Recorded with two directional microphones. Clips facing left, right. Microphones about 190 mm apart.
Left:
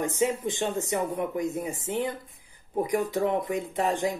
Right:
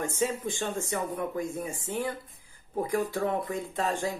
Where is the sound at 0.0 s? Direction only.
15° left (ahead or behind).